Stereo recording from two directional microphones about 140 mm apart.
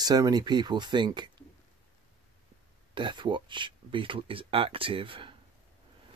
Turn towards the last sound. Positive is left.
turn(degrees=-40)  # may be behind; listen again after turning